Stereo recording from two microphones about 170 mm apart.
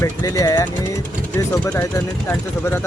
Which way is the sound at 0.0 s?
20° left (ahead or behind).